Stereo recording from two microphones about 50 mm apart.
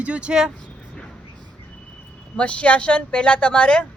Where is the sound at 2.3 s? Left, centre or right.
Left.